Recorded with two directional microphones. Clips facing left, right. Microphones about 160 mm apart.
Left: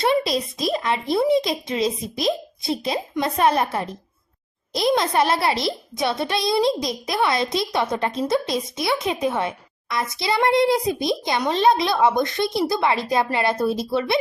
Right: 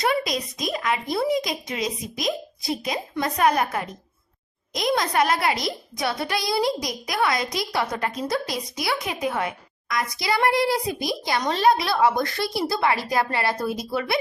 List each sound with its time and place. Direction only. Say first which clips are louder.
0.0 s speech: left 4 dB; 30° left (ahead or behind)